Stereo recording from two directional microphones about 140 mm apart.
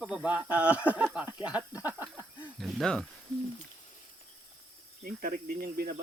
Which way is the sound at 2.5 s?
5° left (ahead or behind).